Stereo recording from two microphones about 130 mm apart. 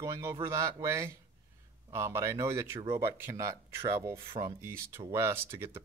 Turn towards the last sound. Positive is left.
turn(degrees=-20)  # may be behind; listen again after turning